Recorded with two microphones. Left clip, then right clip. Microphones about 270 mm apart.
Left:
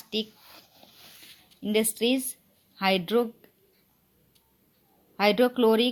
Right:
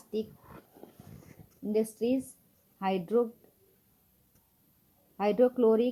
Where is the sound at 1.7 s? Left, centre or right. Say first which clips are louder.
Left 4 dB; left.